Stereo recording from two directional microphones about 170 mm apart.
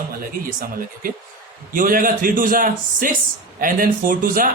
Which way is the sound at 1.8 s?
55° right (ahead or behind).